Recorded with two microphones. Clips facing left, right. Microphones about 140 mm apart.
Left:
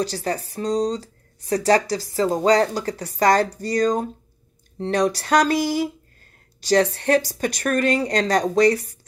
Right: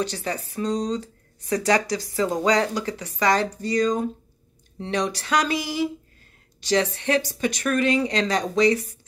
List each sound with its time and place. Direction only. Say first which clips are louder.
0.0 s speech: left 3 dB; 40° left (ahead or behind)